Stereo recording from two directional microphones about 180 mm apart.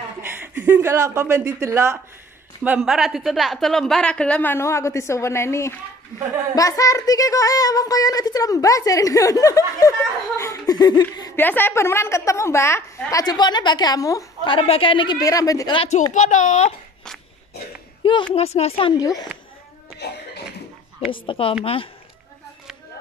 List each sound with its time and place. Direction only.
0.3 s speech: 10° right (ahead or behind)
2.6 s a woman's voice: 5° right (ahead or behind); by 5.8 s 15° left (ahead or behind)
6.5 s child singing: 20° left (ahead or behind)
11.3 s child singing: 10° left (ahead or behind)
16.1 s speech: 45° left (ahead or behind)
18.3 s child singing: 35° left (ahead or behind)
20.0 s speech: 70° left (ahead or behind)
21.1 s child singing: 30° left (ahead or behind)